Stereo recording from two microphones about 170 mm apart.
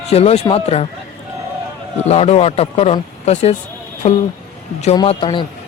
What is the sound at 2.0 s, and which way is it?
Speech, 40° left (ahead or behind).